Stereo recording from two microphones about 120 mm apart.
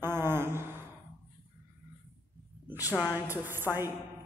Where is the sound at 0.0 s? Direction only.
20° right (ahead or behind).